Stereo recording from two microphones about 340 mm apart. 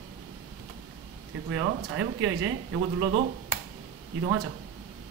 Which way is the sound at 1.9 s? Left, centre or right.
Right.